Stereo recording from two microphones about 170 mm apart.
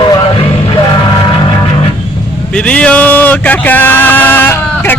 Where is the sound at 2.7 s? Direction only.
5° left (ahead or behind).